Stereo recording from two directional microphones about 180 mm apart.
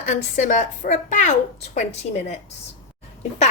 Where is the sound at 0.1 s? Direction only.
40° left (ahead or behind).